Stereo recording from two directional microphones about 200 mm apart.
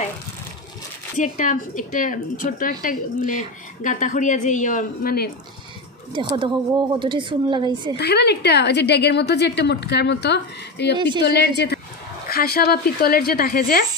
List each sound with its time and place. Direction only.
1.1 s speech: 40° left (ahead or behind)
6.1 s speech: 25° right (ahead or behind)
8.0 s a woman's voice: 55° left (ahead or behind)
11.0 s speech: 25° right (ahead or behind)
11.2 s a woman's voice: 55° left (ahead or behind)